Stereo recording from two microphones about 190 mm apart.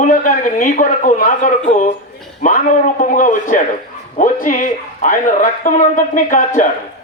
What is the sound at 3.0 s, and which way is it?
Speech, 45° left (ahead or behind).